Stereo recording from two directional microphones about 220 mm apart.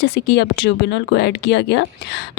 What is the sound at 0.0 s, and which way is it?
A woman's voice, 50° left (ahead or behind).